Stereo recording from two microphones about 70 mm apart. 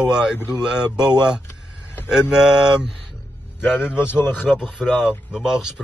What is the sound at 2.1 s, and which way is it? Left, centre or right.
Speech, centre.